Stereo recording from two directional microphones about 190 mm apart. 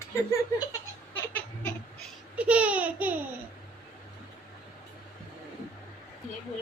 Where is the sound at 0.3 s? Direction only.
20° left (ahead or behind).